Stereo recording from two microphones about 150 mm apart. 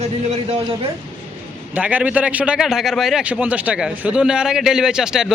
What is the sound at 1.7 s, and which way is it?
A man's voice, 10° right (ahead or behind).